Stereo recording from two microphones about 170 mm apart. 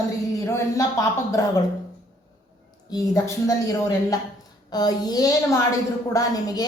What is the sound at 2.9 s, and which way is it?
A woman's voice, 20° left (ahead or behind).